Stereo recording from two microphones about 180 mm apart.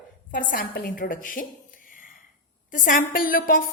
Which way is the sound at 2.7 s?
50° left (ahead or behind).